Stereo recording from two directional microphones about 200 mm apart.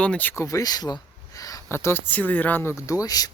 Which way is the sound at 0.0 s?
5° left (ahead or behind).